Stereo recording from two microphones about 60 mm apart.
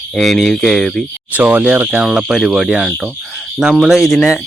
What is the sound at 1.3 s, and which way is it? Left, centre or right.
Speech, right.